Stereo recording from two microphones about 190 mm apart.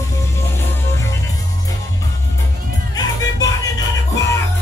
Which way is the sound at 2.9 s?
20° left (ahead or behind).